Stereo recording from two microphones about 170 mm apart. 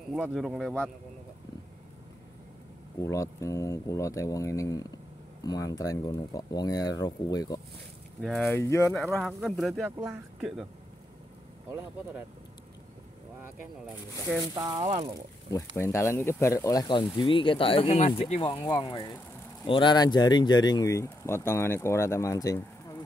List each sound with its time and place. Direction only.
0.1 s speech: 5° left (ahead or behind)
3.0 s speech: 20° left (ahead or behind)
8.2 s speech: centre (ahead or behind)
8.5 s speech: 15° left (ahead or behind)
9.2 s speech: centre (ahead or behind)
9.8 s speech: 15° right (ahead or behind)
14.5 s speech: 25° right (ahead or behind)
15.7 s speech: 15° left (ahead or behind)